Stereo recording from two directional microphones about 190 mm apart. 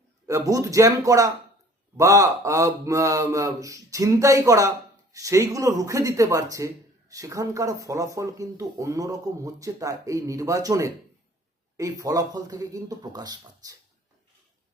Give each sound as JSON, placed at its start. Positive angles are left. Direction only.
{"t": 0.3, "sound": "speech", "side_deg": -15}